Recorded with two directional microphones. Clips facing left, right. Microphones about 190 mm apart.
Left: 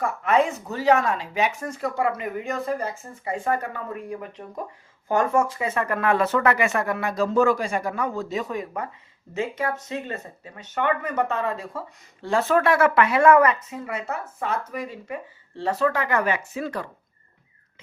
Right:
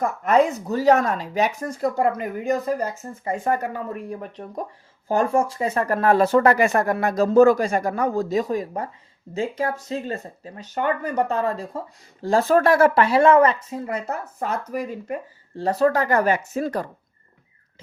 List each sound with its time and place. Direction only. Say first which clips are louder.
0.0 s speech: right 3 dB; 40° right (ahead or behind)